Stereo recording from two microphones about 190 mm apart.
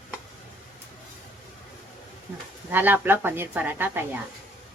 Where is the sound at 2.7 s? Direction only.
10° right (ahead or behind).